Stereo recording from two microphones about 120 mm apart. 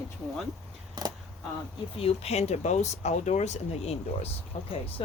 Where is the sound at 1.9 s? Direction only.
55° left (ahead or behind).